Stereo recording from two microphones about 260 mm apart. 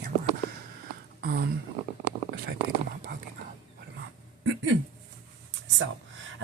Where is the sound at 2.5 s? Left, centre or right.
Right.